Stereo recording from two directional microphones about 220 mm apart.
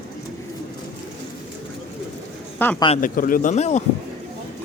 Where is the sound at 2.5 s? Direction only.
10° left (ahead or behind).